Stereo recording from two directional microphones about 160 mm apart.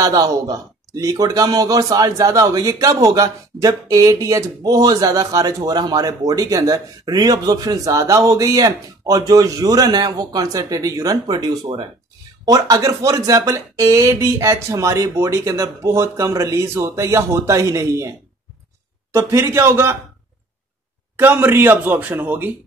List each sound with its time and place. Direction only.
0.0 s speech: 25° right (ahead or behind)
19.1 s a man's voice: 15° right (ahead or behind)
21.2 s a man's voice: 15° right (ahead or behind)